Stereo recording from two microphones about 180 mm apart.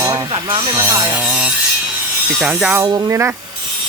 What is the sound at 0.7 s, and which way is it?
Speech, 15° right (ahead or behind).